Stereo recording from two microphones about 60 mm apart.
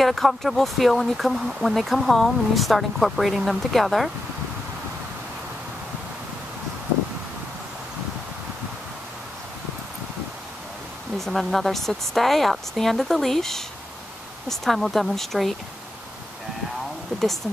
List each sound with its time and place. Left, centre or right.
0.0 s speech: centre
11.1 s speech: centre